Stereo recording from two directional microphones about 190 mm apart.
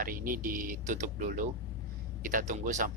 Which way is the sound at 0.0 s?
50° right (ahead or behind).